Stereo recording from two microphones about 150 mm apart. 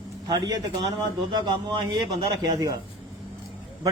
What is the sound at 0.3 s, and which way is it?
A man's voice, 25° right (ahead or behind).